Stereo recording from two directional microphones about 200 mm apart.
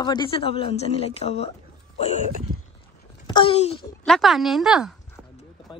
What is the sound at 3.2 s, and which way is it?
Speech, 25° left (ahead or behind).